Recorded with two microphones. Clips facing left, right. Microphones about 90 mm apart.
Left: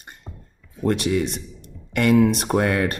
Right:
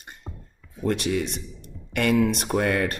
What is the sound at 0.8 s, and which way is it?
Speech, 50° left (ahead or behind).